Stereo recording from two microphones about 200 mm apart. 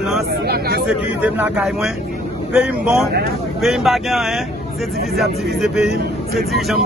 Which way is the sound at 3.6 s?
Centre (ahead or behind).